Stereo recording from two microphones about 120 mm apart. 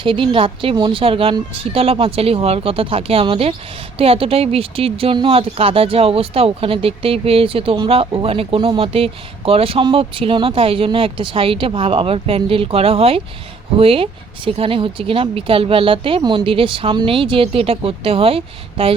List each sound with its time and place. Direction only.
0.0 s speech: 45° right (ahead or behind)